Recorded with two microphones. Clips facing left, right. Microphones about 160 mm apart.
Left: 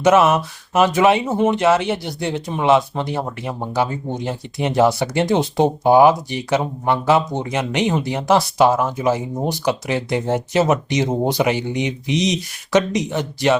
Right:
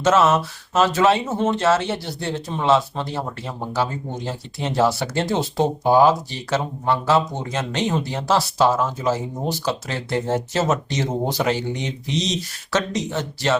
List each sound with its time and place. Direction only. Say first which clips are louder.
0.0 s speech: left 3 dB; 15° left (ahead or behind)